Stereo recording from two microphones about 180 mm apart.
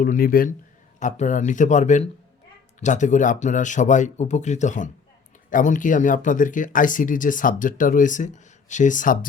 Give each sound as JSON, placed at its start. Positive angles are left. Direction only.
{"t": 0.0, "sound": "speech", "side_deg": 50}
{"t": 0.9, "sound": "speech", "side_deg": 40}